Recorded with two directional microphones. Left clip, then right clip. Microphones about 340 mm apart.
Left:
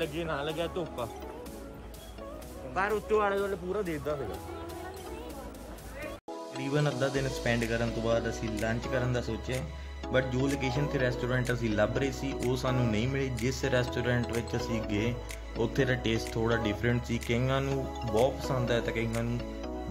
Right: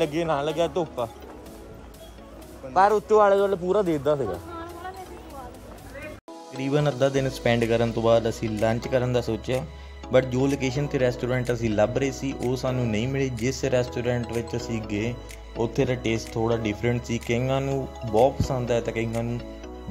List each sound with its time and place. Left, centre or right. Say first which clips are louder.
0.0 s speech: right 9 dB; centre
2.7 s speech: right 10 dB; centre
6.5 s speech: right 7 dB; centre
19.1 s speech: right 5 dB; centre